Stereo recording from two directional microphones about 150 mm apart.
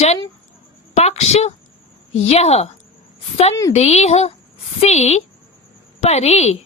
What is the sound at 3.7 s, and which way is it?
Speech, 45° left (ahead or behind).